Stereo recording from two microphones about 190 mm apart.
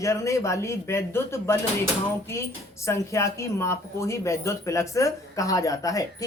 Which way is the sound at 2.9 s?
15° left (ahead or behind).